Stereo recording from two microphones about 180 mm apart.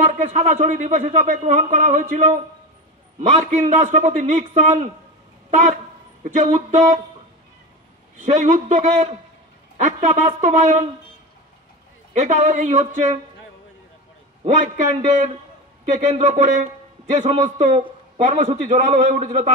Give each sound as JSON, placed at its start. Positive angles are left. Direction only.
{"t": 0.0, "sound": "a man's voice", "side_deg": -45}
{"t": 8.2, "sound": "a man's voice", "side_deg": -40}
{"t": 12.2, "sound": "a man's voice", "side_deg": -40}
{"t": 14.4, "sound": "a man's voice", "side_deg": -45}